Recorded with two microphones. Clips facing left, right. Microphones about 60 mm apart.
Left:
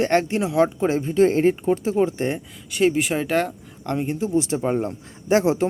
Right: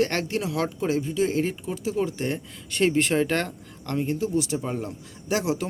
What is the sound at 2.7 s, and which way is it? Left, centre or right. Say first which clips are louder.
Speech: left 2 dB; centre.